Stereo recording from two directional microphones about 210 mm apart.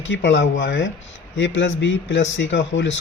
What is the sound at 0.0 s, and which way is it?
A man's voice, 60° left (ahead or behind).